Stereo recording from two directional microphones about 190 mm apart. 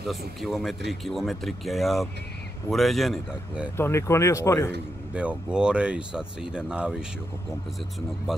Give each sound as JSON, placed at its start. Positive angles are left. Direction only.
{"t": 0.4, "sound": "speech", "side_deg": 0}
{"t": 3.7, "sound": "speech", "side_deg": 15}
{"t": 5.1, "sound": "speech", "side_deg": -5}